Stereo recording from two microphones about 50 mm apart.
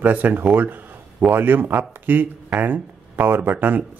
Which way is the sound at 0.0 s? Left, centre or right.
Right.